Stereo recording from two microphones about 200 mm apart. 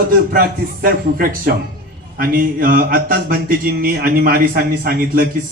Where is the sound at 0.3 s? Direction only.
45° right (ahead or behind).